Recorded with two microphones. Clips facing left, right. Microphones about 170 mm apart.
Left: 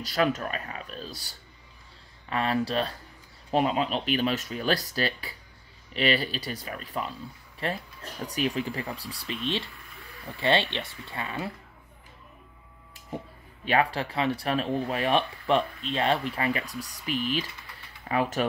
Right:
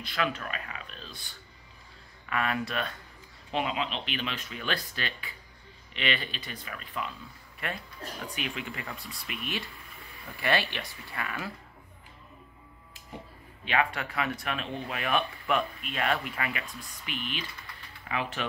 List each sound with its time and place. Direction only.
0.0 s a sound: 40° left (ahead or behind)
2.2 s speech: 30° left (ahead or behind)
13.7 s speech: 35° left (ahead or behind)